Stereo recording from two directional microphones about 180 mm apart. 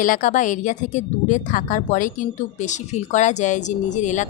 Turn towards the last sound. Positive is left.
turn(degrees=40)  # may be behind; listen again after turning